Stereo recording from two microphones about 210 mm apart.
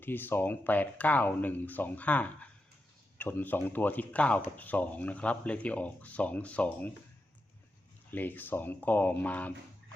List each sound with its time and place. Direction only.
0.0 s speech: 10° left (ahead or behind)
8.1 s speech: 10° left (ahead or behind)